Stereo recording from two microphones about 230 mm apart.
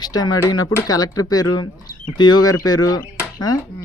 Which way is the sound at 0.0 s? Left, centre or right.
Centre.